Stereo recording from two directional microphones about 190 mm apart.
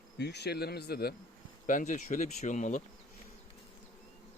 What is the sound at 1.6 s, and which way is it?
Speech, 45° left (ahead or behind).